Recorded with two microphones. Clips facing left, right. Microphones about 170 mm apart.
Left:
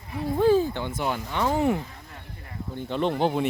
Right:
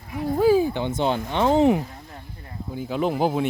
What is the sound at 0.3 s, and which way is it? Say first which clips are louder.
Speech: right 2 dB; 10° right (ahead or behind).